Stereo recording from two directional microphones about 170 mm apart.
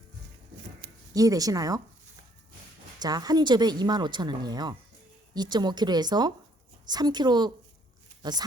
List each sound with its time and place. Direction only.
1.1 s speech: 20° right (ahead or behind)
3.0 s speech: 25° right (ahead or behind)